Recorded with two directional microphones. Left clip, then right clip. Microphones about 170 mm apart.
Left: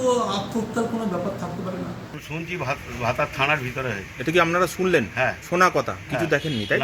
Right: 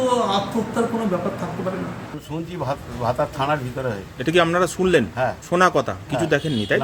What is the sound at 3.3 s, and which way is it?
A man's voice, 15° right (ahead or behind).